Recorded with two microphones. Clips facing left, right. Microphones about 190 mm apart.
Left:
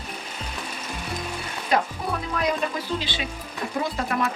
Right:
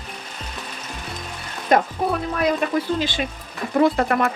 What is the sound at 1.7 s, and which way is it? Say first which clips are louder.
Speech: right 5 dB; 50° right (ahead or behind).